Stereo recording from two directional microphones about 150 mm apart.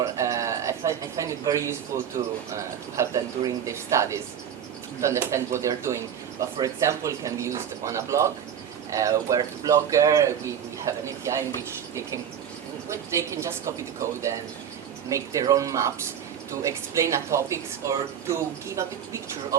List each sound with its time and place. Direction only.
0.0 s a sound: 20° right (ahead or behind)
2.9 s a man's voice: 20° right (ahead or behind)
12.9 s a man's voice: 20° right (ahead or behind)